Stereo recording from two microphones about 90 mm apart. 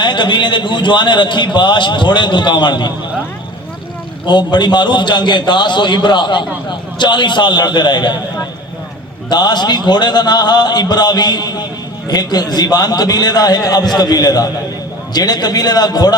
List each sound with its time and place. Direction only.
0.0 s a man's voice: 55° left (ahead or behind)
4.3 s a man's voice: 55° left (ahead or behind)
9.3 s a man's voice: 55° left (ahead or behind)